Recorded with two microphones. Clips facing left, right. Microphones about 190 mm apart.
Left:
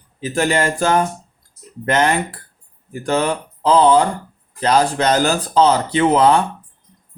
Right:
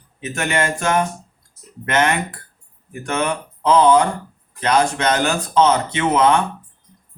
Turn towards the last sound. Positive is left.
turn(degrees=35)  # may be behind; listen again after turning